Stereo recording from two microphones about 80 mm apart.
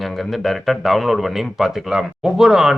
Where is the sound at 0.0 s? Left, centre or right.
Centre.